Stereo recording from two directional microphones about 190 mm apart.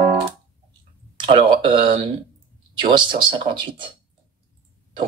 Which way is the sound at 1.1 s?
25° right (ahead or behind).